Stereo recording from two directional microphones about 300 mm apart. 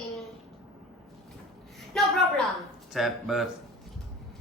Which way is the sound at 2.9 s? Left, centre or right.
Centre.